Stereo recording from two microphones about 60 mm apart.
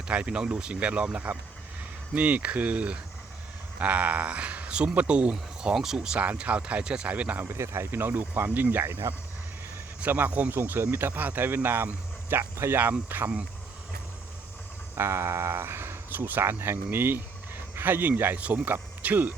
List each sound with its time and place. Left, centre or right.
0.1 s a man's voice: centre
6.1 s speech: right
7.4 s speech: right
8.8 s speech: right
10.0 s speech: right
10.5 s speech: right
14.9 s speech: right